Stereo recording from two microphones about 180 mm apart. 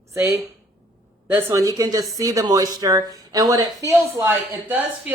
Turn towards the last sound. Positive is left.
turn(degrees=-10)  # may be behind; listen again after turning